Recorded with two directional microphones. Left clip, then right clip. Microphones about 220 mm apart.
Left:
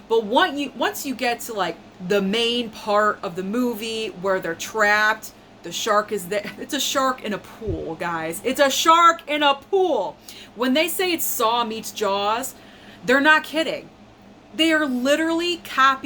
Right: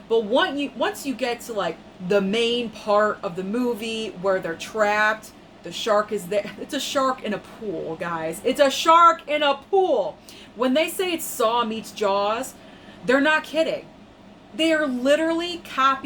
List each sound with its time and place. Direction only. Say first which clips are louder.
0.1 s a woman's voice: left 2 dB; 15° left (ahead or behind)